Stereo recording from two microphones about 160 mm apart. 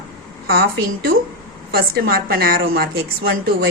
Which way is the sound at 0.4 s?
70° right (ahead or behind).